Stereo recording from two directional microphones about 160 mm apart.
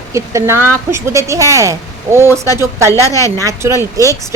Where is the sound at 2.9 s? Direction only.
20° left (ahead or behind).